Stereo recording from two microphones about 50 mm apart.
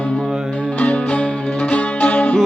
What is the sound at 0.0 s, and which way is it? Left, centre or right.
Music, left.